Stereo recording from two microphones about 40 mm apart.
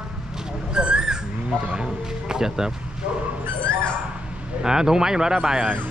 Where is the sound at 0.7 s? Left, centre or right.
Right.